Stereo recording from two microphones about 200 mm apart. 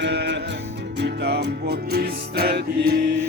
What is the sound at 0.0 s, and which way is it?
Music, 60° right (ahead or behind).